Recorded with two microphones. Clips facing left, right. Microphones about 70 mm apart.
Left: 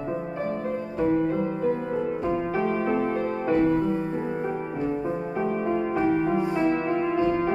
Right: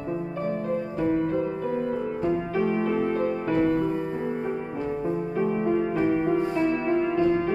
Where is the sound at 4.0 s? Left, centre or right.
Centre.